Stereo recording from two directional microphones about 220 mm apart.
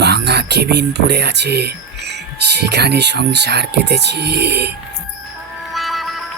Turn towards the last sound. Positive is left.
turn(degrees=0)  # may be behind; listen again after turning